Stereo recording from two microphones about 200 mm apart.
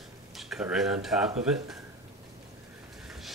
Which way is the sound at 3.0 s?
Centre (ahead or behind).